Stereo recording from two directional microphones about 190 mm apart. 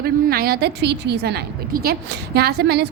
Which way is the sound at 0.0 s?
50° right (ahead or behind).